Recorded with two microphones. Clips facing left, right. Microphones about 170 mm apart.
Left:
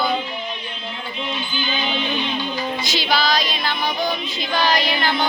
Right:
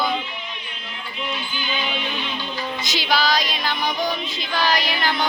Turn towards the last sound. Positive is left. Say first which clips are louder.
# left 2 dB
turn(degrees=-10)  # may be behind; listen again after turning